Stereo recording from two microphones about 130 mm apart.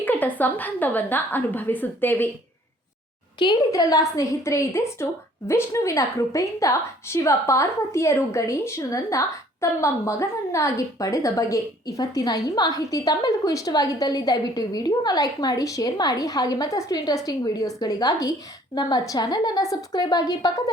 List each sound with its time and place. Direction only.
0.0 s a woman's voice: 15° left (ahead or behind)
3.3 s a woman's voice: 35° left (ahead or behind)